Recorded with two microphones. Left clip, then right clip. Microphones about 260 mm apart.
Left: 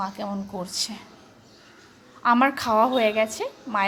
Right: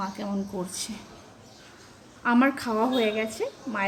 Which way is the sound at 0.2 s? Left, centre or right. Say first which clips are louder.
Left 3 dB; centre.